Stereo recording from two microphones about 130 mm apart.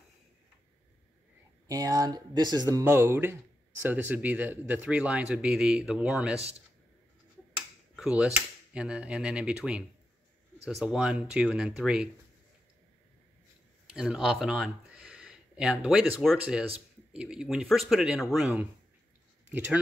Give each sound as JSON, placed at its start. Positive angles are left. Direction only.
{"t": 1.7, "sound": "speech", "side_deg": -30}
{"t": 2.8, "sound": "speech", "side_deg": -20}
{"t": 7.5, "sound": "speech", "side_deg": -5}
{"t": 13.9, "sound": "speech", "side_deg": -5}